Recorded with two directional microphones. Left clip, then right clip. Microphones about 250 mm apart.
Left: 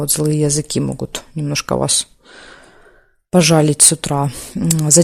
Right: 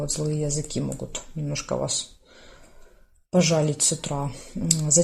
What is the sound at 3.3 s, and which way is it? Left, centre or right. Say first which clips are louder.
Speech: left 9 dB; left.